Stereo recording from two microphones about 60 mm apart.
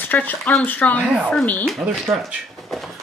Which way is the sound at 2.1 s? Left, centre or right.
Right.